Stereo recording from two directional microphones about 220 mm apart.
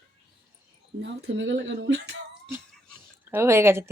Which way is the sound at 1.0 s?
55° right (ahead or behind).